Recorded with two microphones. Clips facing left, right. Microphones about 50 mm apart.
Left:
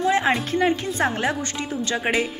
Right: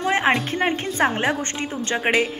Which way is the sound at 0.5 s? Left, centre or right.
Right.